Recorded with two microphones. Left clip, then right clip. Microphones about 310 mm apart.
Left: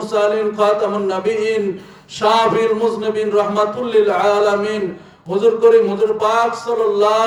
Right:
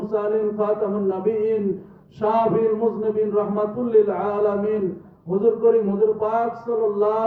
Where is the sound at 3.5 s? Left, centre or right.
Centre.